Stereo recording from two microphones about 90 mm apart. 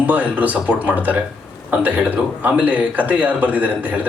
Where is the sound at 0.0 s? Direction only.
15° right (ahead or behind).